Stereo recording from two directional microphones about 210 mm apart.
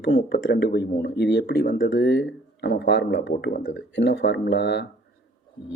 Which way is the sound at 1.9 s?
60° left (ahead or behind).